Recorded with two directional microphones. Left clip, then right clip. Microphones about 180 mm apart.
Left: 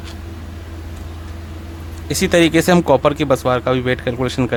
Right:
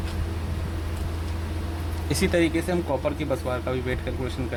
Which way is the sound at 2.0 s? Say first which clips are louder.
Left 9 dB; 40° left (ahead or behind).